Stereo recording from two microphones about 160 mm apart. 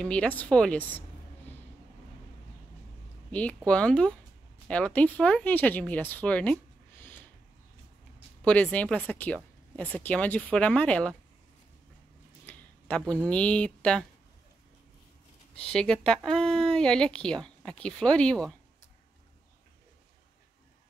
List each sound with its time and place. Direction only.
0.0 s speech: 5° left (ahead or behind)
3.3 s speech: 10° left (ahead or behind)
8.5 s speech: 5° left (ahead or behind)
12.4 s a sound: 10° left (ahead or behind)
13.3 s speech: 5° left (ahead or behind)
15.5 s speech: 5° left (ahead or behind)